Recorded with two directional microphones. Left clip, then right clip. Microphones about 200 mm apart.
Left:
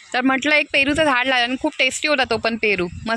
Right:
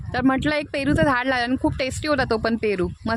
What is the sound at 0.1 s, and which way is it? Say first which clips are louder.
Speech: left 4 dB; 15° right (ahead or behind).